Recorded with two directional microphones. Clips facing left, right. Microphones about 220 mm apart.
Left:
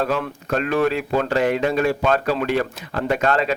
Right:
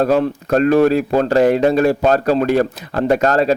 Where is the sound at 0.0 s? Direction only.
40° right (ahead or behind).